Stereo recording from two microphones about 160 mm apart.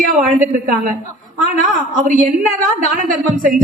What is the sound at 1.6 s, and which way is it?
A man's voice, 55° right (ahead or behind).